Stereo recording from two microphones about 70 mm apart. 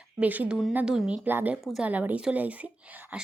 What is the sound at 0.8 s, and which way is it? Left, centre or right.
Speech, centre.